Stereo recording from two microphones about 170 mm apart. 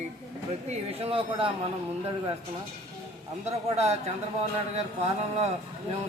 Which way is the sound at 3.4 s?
40° right (ahead or behind).